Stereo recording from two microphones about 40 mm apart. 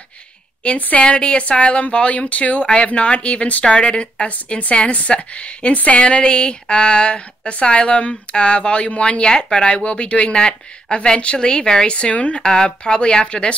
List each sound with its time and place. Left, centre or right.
0.7 s a woman's voice: left
1.0 s speech: left